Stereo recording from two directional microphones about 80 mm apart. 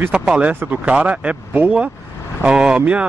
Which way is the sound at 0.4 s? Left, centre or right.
Centre.